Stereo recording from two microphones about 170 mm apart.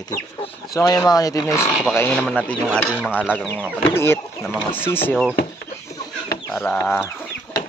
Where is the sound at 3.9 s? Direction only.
15° left (ahead or behind).